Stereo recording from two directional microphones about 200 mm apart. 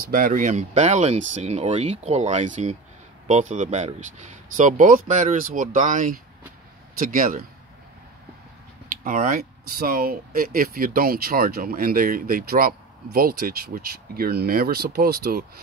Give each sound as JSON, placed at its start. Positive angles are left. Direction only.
{"t": 0.1, "sound": "speech", "side_deg": -40}
{"t": 9.0, "sound": "speech", "side_deg": -45}